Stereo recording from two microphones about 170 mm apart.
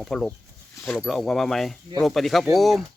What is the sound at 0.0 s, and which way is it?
Speech, centre (ahead or behind).